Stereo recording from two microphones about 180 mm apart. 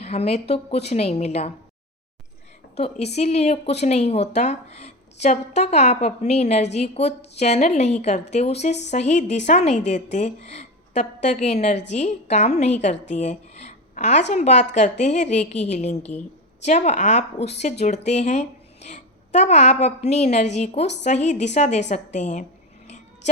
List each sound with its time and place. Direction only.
0.0 s a woman's voice: 35° left (ahead or behind)
2.7 s a woman's voice: 35° left (ahead or behind)